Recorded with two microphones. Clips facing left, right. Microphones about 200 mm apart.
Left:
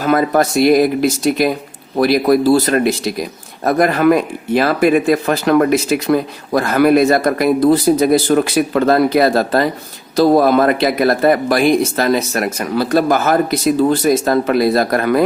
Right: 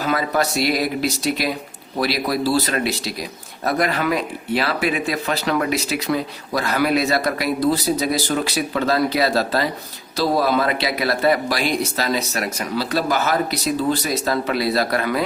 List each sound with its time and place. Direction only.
0.0 s speech: 50° left (ahead or behind)